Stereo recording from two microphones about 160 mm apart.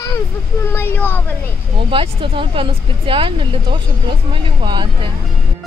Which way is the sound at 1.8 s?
35° right (ahead or behind).